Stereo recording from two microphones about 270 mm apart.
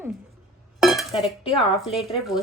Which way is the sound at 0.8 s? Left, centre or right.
Centre.